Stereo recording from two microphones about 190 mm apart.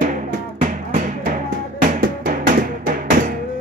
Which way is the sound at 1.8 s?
45° right (ahead or behind).